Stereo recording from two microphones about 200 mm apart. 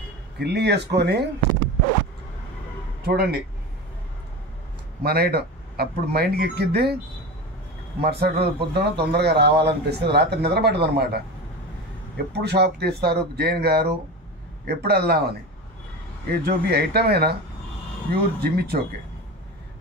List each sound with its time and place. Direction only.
0.4 s a man's voice: 55° right (ahead or behind)
3.1 s a man's voice: 55° right (ahead or behind)
5.0 s speech: 50° right (ahead or behind)
8.0 s a man's voice: 50° right (ahead or behind)
12.3 s speech: 55° right (ahead or behind)